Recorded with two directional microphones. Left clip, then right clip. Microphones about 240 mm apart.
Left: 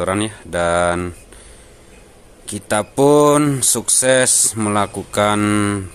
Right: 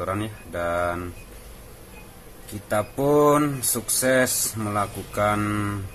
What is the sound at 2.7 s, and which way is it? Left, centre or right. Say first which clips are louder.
Speech: left 8 dB; left.